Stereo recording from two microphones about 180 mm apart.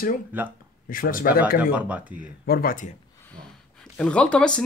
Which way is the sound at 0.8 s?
50° left (ahead or behind).